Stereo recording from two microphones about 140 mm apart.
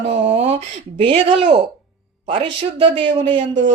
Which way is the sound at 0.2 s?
40° right (ahead or behind).